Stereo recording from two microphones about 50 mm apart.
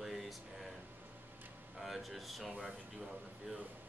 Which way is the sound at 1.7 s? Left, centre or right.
Centre.